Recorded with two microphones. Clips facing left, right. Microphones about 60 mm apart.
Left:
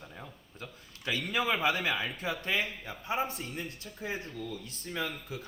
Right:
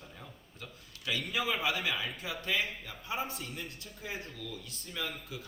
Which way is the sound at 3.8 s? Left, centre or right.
Left.